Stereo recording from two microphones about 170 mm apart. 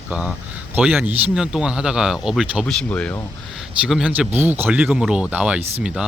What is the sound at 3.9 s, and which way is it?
Speech, 5° right (ahead or behind).